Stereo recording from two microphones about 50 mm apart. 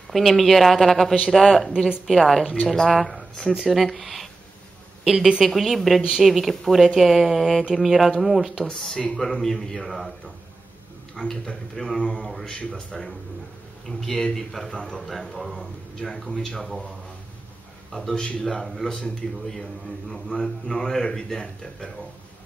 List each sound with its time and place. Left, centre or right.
0.1 s a woman's voice: centre
8.6 s a man's voice: centre
11.1 s a man's voice: centre
13.8 s a man's voice: centre
16.0 s a man's voice: centre
17.9 s a man's voice: centre